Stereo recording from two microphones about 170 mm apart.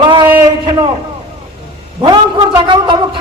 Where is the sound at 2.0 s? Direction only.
30° right (ahead or behind).